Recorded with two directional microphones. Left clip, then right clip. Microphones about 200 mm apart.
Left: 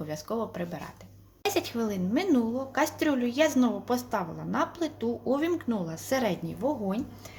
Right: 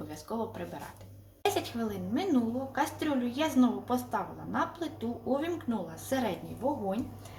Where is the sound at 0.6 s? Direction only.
55° left (ahead or behind).